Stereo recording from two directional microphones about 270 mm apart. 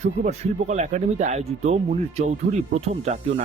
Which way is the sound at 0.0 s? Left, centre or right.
Right.